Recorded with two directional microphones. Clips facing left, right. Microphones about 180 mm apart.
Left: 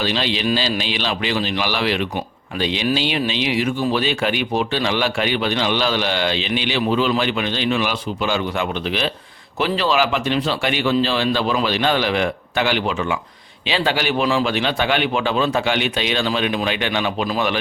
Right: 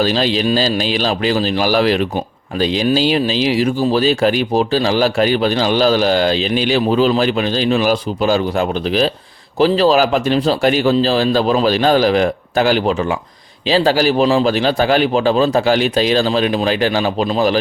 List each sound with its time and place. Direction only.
0.0 s speech: 40° right (ahead or behind)